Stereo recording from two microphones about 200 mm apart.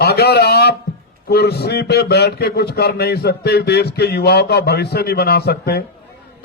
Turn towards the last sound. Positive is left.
turn(degrees=55)  # may be behind; listen again after turning